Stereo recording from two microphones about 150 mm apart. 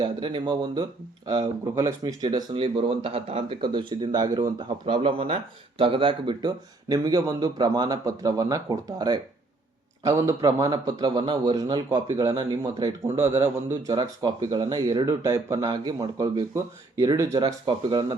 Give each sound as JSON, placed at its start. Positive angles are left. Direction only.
{"t": 0.0, "sound": "speech", "side_deg": -35}
{"t": 13.9, "sound": "speech", "side_deg": -30}